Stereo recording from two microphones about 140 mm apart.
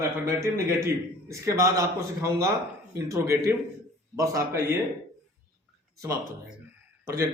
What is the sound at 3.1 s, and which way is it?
A man's voice, 20° right (ahead or behind).